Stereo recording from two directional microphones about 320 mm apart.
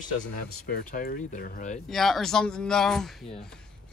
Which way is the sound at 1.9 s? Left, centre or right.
Centre.